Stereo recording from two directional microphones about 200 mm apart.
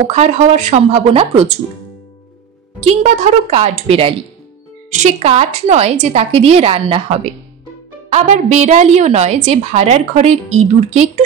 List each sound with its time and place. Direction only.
0.0 s a woman's voice: 35° right (ahead or behind)
2.8 s a woman's voice: 35° right (ahead or behind)